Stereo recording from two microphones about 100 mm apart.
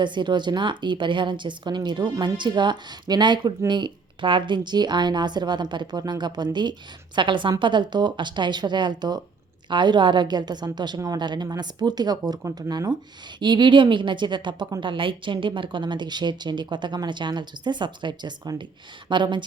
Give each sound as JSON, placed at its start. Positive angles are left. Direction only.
{"t": 0.0, "sound": "a woman's voice", "side_deg": -50}
{"t": 13.4, "sound": "a woman's voice", "side_deg": -50}